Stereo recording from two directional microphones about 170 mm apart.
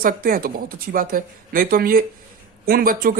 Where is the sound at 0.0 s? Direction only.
55° right (ahead or behind).